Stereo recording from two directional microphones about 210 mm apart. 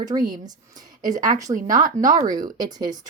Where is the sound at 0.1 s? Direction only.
20° right (ahead or behind).